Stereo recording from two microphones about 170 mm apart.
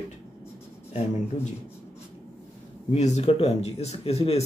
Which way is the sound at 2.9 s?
40° left (ahead or behind).